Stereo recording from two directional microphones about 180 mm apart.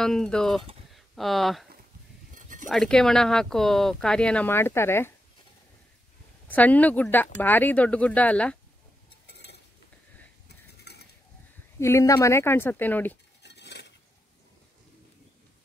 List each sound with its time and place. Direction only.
0.0 s speech: 5° left (ahead or behind)
2.3 s a sound: 45° right (ahead or behind)
2.7 s speech: 5° left (ahead or behind)
6.4 s speech: 10° left (ahead or behind)
9.3 s cutlery: 70° left (ahead or behind)
10.9 s a sound: 65° left (ahead or behind)
11.8 s speech: 15° left (ahead or behind)
13.4 s cutlery: 70° left (ahead or behind)